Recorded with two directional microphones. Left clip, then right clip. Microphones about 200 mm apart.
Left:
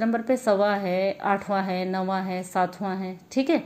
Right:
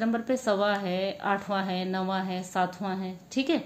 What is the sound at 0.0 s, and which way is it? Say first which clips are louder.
A woman's voice: left 4 dB; 15° left (ahead or behind).